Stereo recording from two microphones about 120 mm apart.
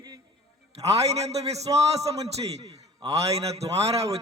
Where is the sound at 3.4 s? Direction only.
60° right (ahead or behind).